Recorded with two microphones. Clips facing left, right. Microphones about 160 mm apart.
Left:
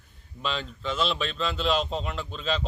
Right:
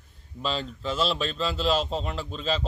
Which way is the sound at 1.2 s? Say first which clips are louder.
Right 1 dB; 35° right (ahead or behind).